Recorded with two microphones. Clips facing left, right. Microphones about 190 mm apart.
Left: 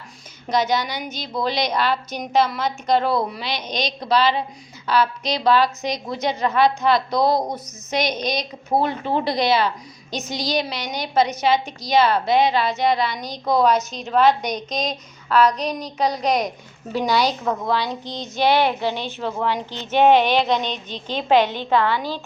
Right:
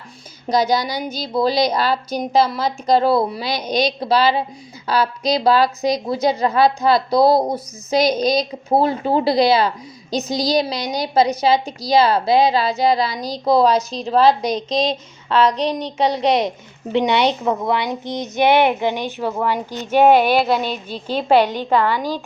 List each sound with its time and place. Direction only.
0.4 s a woman's voice: 35° right (ahead or behind)
3.7 s a woman's voice: 10° right (ahead or behind)
4.9 s a woman's voice: 35° right (ahead or behind); by 22.2 s 10° right (ahead or behind)